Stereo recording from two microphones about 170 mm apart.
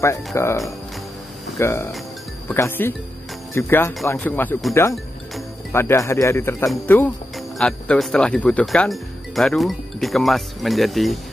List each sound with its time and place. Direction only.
0.0 s speech: 15° left (ahead or behind)
1.6 s speech: 15° left (ahead or behind)
5.7 s speech: 15° left (ahead or behind)
7.3 s speech: 5° left (ahead or behind)